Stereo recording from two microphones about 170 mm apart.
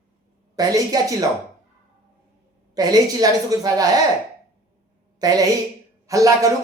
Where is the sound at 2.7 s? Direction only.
25° right (ahead or behind).